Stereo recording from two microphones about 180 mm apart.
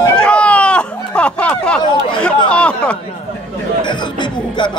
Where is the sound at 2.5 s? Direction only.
5° left (ahead or behind).